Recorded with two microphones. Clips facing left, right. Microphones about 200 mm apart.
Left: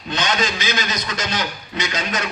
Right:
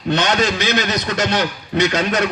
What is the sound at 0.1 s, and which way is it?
A man's voice, 65° right (ahead or behind).